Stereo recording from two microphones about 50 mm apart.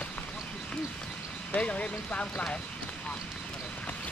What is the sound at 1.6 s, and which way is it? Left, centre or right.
Speech, left.